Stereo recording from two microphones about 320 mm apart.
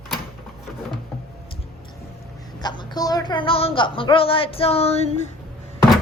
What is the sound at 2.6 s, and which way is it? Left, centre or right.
A woman's voice, centre.